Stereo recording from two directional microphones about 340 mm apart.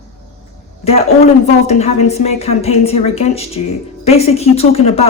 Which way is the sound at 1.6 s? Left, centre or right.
Centre.